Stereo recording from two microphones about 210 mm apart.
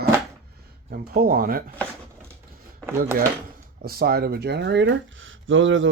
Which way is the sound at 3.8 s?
45° right (ahead or behind).